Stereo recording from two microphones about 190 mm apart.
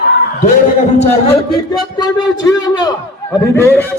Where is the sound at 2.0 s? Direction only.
20° left (ahead or behind).